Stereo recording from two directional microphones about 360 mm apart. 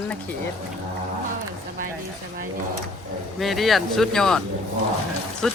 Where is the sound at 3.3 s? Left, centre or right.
Centre.